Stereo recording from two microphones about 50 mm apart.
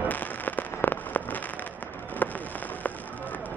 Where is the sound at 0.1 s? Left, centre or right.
Left.